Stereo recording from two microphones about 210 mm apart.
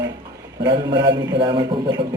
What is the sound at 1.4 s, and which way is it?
Speech, 25° right (ahead or behind).